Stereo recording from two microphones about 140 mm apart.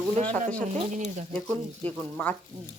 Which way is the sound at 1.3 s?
10° left (ahead or behind).